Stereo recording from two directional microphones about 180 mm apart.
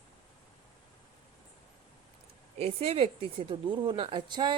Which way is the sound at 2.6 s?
35° right (ahead or behind).